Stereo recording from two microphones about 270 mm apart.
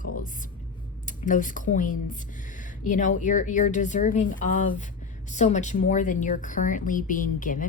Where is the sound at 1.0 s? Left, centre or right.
Left.